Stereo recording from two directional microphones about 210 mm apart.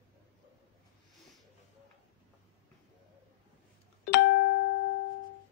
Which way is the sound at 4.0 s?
60° left (ahead or behind).